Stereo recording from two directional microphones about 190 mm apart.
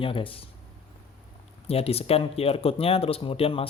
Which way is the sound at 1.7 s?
30° left (ahead or behind).